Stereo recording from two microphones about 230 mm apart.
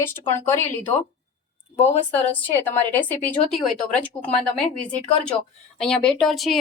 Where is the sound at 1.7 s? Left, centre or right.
Left.